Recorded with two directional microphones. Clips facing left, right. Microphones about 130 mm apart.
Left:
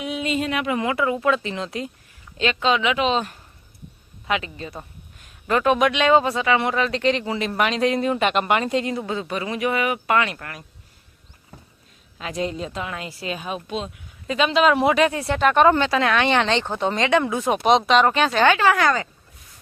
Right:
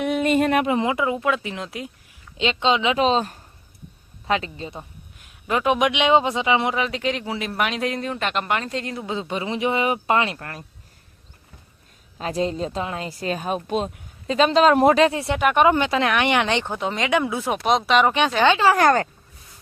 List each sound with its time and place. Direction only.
0.0 s a sound: 55° right (ahead or behind)
0.6 s speech: 25° right (ahead or behind)
1.2 s speech: 5° right (ahead or behind)
2.4 s speech: 25° right (ahead or behind)
4.8 s speech: 5° right (ahead or behind)
9.0 s speech: 20° right (ahead or behind)
12.1 s speech: 35° right (ahead or behind)
14.3 s speech: 35° right (ahead or behind)
15.0 s speech: 25° right (ahead or behind)
15.4 s speech: 10° right (ahead or behind)
16.7 s speech: 5° right (ahead or behind)
18.5 s speech: 30° right (ahead or behind)
18.8 s speech: 50° right (ahead or behind)